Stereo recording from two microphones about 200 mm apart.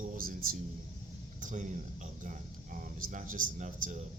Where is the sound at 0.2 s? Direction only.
45° right (ahead or behind).